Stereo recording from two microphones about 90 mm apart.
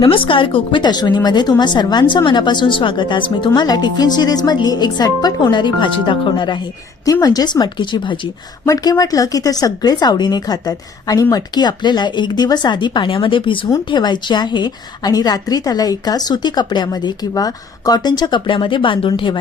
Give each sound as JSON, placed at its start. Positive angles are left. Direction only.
{"t": 0.0, "sound": "a woman's voice", "side_deg": 75}
{"t": 7.0, "sound": "a woman's voice", "side_deg": 45}
{"t": 8.6, "sound": "a woman's voice", "side_deg": 45}
{"t": 13.9, "sound": "a woman's voice", "side_deg": 55}